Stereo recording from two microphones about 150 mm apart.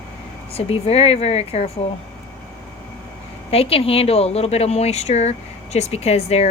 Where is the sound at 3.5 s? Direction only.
40° left (ahead or behind).